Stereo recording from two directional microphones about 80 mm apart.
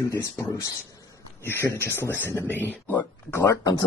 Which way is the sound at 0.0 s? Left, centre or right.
Left.